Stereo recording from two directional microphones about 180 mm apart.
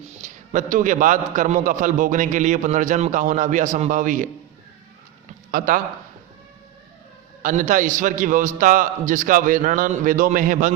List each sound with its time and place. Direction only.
0.2 s a man's voice: 45° right (ahead or behind)
5.5 s a man's voice: 50° right (ahead or behind)
7.4 s a man's voice: 45° right (ahead or behind)